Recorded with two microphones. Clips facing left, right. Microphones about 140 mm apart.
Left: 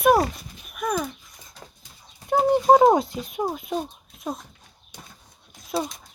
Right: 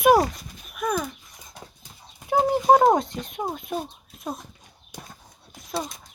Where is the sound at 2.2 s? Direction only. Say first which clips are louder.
Left 1 dB; centre (ahead or behind).